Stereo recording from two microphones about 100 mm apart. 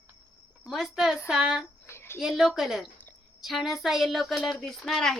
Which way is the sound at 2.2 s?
5° right (ahead or behind).